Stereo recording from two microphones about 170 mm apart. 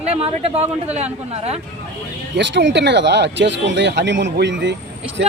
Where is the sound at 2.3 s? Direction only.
90° right.